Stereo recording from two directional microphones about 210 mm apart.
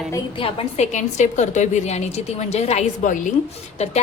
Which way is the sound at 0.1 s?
25° left (ahead or behind).